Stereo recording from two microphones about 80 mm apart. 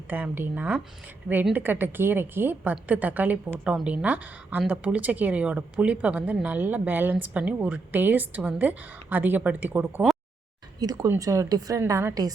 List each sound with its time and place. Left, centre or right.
0.1 s speech: right
10.8 s speech: right
11.8 s a woman's voice: right